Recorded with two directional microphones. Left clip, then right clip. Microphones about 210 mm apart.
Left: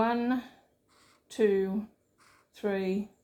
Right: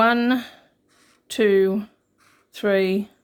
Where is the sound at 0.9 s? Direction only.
10° right (ahead or behind).